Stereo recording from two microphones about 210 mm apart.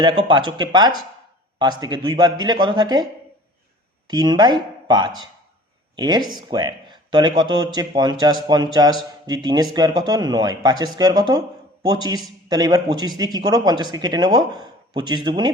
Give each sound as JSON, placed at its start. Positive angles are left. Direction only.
{"t": 0.0, "sound": "speech", "side_deg": -20}